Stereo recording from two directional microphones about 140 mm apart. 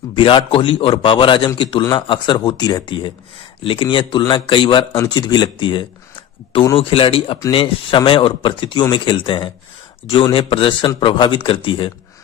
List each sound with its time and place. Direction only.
0.1 s speech: 35° left (ahead or behind)